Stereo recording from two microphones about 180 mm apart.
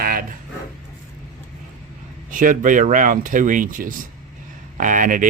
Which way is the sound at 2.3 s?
45° right (ahead or behind).